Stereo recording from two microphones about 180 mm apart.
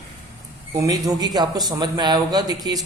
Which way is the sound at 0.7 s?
20° right (ahead or behind).